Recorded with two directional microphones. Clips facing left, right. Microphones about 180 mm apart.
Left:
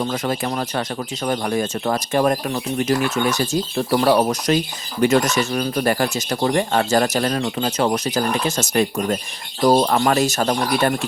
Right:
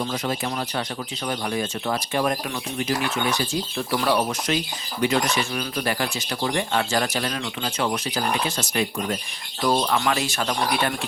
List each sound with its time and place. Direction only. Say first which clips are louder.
0.0 s speech: left 4 dB; 50° left (ahead or behind)